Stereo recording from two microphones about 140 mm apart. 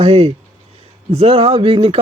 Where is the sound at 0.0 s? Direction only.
45° right (ahead or behind).